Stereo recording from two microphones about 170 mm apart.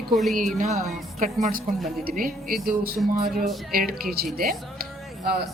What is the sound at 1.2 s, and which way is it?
A woman's voice, 50° right (ahead or behind).